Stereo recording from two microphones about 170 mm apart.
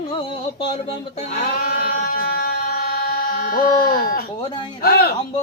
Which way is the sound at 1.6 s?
60° left (ahead or behind).